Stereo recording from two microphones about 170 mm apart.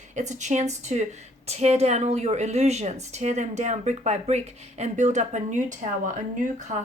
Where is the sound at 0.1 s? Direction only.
45° right (ahead or behind).